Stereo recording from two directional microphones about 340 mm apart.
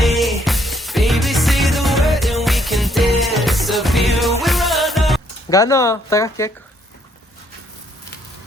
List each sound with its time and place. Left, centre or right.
0.0 s music: centre